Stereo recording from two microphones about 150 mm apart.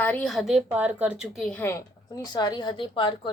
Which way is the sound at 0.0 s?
10° left (ahead or behind).